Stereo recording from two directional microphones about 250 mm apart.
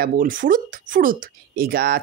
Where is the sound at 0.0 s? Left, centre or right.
Right.